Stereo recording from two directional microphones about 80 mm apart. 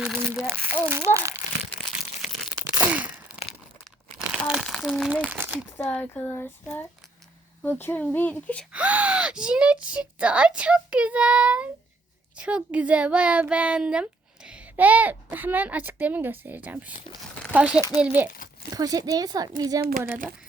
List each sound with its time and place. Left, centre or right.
0.4 s speech: right
0.9 s a child's voice: right
2.8 s a sound: centre
4.2 s crumpling: centre
4.6 s a sound: centre
5.0 s crumpling: centre
5.3 s a sound: right
5.7 s speech: left
7.6 s speech: left
8.7 s speech: centre
17.7 s a child's voice: left
18.0 s speech: right
18.7 s speech: right